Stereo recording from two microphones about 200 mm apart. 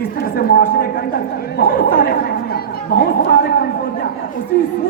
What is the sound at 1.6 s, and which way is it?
Speech, 45° left (ahead or behind).